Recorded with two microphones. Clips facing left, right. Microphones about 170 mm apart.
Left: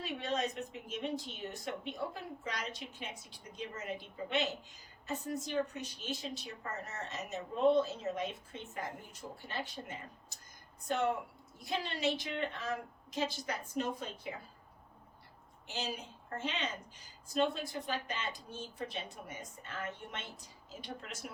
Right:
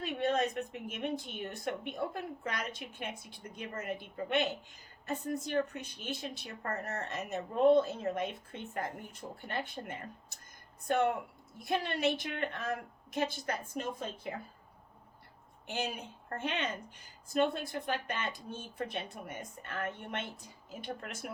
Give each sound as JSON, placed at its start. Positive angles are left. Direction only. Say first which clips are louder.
{"t": 0.0, "sound": "speech", "louder": "right 5 dB", "side_deg": -55}
{"t": 15.6, "sound": "speech", "louder": "right 3 dB", "side_deg": -55}